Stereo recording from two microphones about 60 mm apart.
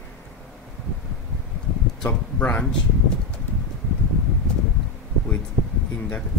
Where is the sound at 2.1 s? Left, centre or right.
Left.